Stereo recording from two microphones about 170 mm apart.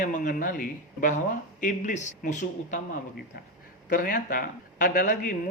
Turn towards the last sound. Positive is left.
turn(degrees=50)  # may be behind; listen again after turning